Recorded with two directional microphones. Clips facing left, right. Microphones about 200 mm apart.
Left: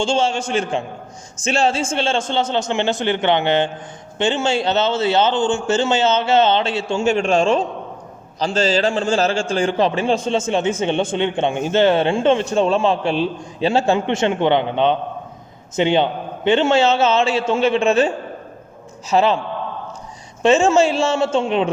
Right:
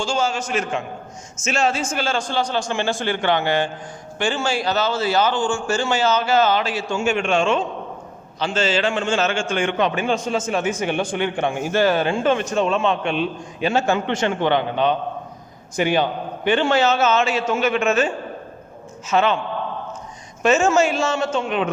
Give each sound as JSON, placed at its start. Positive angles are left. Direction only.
{"t": 0.0, "sound": "a man's voice", "side_deg": 30}
{"t": 20.4, "sound": "a man's voice", "side_deg": 30}